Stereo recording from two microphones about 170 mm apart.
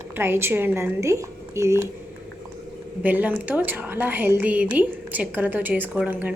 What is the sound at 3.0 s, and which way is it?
A woman's voice, 10° right (ahead or behind).